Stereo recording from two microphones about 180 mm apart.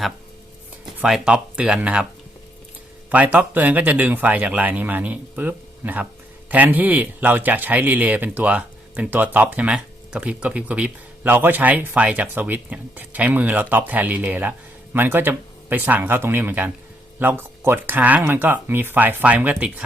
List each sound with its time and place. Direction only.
0.9 s speech: 5° right (ahead or behind)
3.1 s speech: 10° right (ahead or behind)